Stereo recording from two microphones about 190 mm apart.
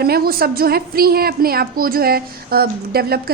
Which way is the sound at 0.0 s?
55° right (ahead or behind).